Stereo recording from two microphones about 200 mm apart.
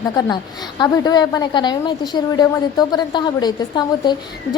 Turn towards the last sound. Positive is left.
turn(degrees=20)  # may be behind; listen again after turning